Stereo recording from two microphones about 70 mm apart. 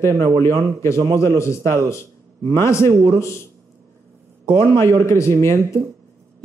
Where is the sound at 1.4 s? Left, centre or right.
Left.